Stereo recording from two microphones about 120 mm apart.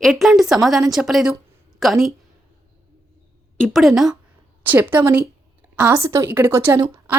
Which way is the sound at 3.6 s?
Centre (ahead or behind).